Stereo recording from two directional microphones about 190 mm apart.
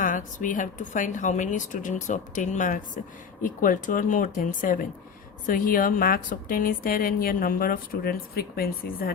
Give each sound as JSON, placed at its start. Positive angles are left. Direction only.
{"t": 0.0, "sound": "a woman's voice", "side_deg": 45}